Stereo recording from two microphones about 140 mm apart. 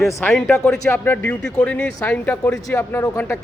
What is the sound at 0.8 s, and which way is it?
Speech, 15° left (ahead or behind).